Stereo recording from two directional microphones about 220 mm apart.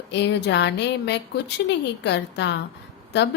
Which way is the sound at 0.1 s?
50° left (ahead or behind).